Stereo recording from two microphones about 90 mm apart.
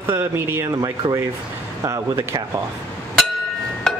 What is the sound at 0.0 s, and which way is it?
Speech, 25° right (ahead or behind).